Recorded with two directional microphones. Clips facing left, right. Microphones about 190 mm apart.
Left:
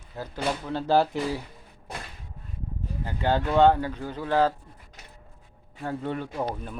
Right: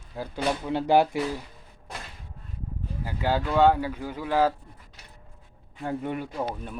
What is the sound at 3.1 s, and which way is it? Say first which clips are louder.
Speech: left 1 dB; 5° right (ahead or behind).